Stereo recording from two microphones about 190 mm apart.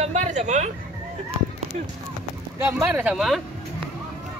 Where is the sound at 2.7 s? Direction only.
10° right (ahead or behind).